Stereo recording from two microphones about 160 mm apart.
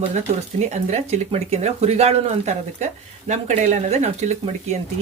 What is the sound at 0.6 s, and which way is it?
Speech, 45° right (ahead or behind).